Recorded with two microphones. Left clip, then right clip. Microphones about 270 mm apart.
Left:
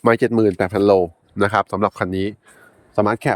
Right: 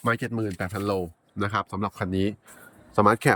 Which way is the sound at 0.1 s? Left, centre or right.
Centre.